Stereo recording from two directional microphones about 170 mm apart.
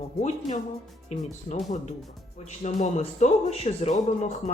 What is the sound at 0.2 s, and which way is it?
Speech, 40° left (ahead or behind).